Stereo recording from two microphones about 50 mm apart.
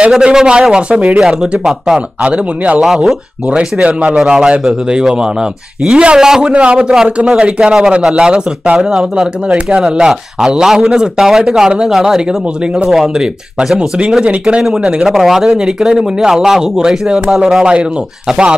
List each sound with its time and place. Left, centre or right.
0.2 s a man's voice: centre
1.6 s speech: centre
2.0 s a man's voice: right
2.8 s speech: centre
3.4 s a man's voice: right
6.5 s a man's voice: right